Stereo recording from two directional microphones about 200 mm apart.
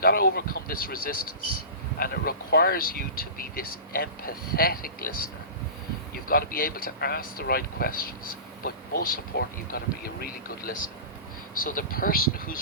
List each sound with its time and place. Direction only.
0.0 s speech: 45° left (ahead or behind)